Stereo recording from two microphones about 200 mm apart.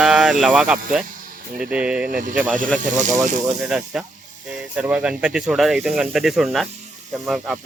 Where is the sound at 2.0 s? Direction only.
45° right (ahead or behind).